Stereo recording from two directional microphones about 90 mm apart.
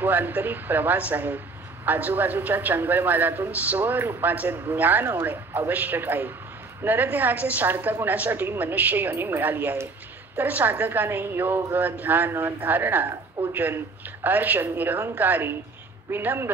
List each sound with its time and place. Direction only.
0.0 s a man's voice: 20° right (ahead or behind)